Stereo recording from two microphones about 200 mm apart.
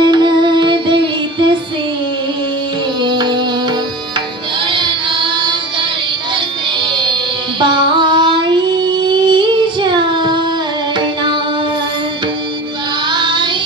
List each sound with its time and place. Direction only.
0.0 s music: 20° right (ahead or behind)
3.0 s music: 20° right (ahead or behind)
4.6 s music: 25° right (ahead or behind)
7.6 s child singing: 25° right (ahead or behind)
9.1 s music: 20° right (ahead or behind)
13.1 s child singing: 25° right (ahead or behind)